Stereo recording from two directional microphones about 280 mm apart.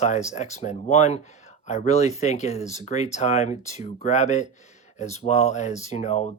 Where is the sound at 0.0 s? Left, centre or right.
Left.